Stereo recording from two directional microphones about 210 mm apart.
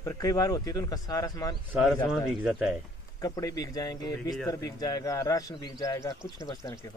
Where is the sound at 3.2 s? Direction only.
15° left (ahead or behind).